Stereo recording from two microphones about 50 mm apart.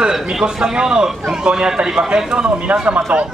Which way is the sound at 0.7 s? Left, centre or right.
Centre.